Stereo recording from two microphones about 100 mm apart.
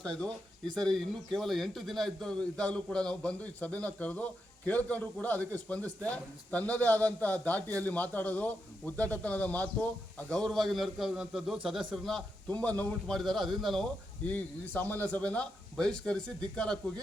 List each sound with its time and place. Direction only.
0.2 s speech: 5° left (ahead or behind)
10.3 s a man's voice: centre (ahead or behind)
12.5 s speech: 15° left (ahead or behind)
13.1 s a man's voice: centre (ahead or behind)
14.3 s speech: 15° left (ahead or behind)